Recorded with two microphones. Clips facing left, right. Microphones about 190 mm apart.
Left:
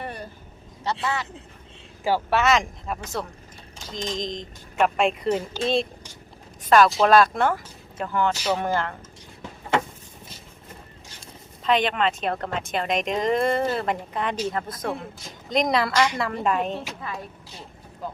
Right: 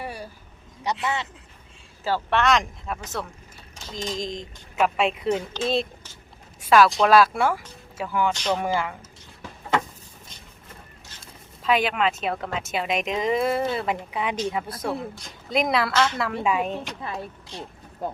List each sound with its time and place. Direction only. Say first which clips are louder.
0.0 s vehicle: even; 10° right (ahead or behind)
1.0 s speech: even; 25° right (ahead or behind)
2.0 s speech: left 1 dB; 10° left (ahead or behind); by 8.3 s 10° right (ahead or behind)
8.3 s speech: even; 5° left (ahead or behind)
8.6 s speech: even; 10° right (ahead or behind)
11.6 s speech: even; 5° right (ahead or behind)
16.0 s speech: left 1 dB; 15° left (ahead or behind)
16.2 s speech: even; 5° right (ahead or behind)
17.0 s speech: right 2 dB; 25° right (ahead or behind)